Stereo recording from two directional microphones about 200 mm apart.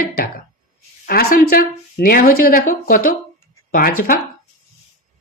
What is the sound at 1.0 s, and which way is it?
A woman's voice, 50° left (ahead or behind).